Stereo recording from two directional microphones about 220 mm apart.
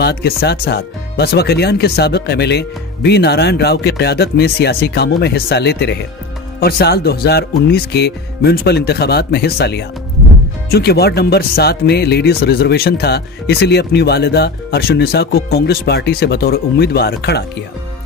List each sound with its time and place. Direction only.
0.0 s speech: 50° left (ahead or behind)